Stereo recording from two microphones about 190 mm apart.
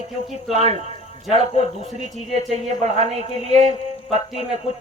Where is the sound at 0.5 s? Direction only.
35° right (ahead or behind).